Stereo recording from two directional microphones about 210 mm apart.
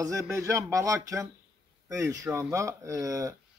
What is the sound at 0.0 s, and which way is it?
Speech, 15° right (ahead or behind).